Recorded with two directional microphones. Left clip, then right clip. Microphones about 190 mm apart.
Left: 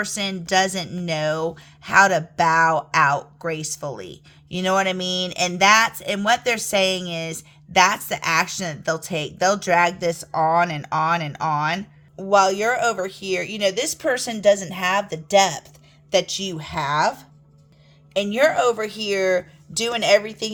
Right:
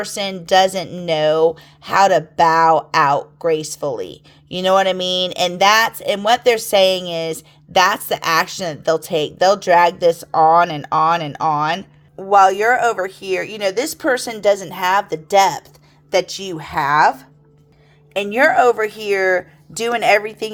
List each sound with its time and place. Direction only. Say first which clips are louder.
0.0 s speech: right 3 dB; 25° right (ahead or behind)